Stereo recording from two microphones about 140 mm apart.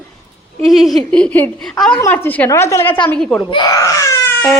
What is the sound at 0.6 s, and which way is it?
A woman's voice, centre (ahead or behind).